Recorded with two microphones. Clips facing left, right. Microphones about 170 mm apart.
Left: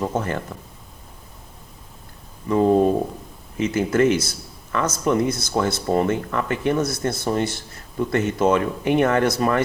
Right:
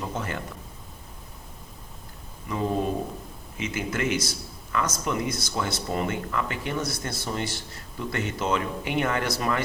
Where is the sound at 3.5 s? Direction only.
45° left (ahead or behind).